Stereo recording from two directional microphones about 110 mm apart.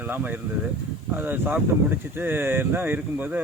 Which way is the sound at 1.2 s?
20° right (ahead or behind).